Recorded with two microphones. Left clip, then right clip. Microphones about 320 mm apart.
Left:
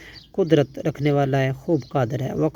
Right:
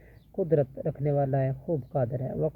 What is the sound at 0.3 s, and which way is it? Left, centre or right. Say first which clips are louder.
Speech: left 7 dB; left.